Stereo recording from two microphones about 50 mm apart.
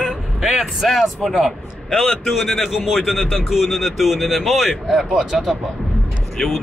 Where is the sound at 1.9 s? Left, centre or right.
Centre.